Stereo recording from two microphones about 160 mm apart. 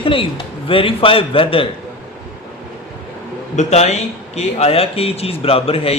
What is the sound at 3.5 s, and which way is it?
A man's voice, 45° left (ahead or behind).